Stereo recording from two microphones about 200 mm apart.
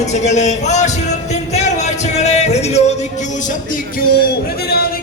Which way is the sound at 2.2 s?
35° left (ahead or behind).